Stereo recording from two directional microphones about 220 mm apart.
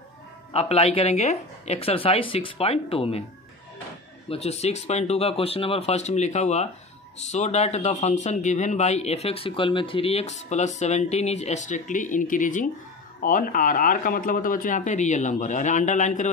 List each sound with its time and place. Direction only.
0.5 s speech: 25° left (ahead or behind)
4.3 s speech: 30° left (ahead or behind)